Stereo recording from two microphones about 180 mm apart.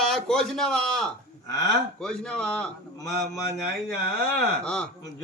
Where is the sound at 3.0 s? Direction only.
15° left (ahead or behind).